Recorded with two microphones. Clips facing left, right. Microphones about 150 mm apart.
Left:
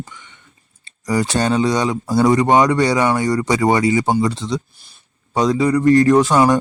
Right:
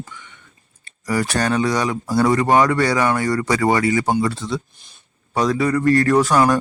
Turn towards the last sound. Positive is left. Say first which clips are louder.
# left 3 dB
turn(degrees=20)  # may be behind; listen again after turning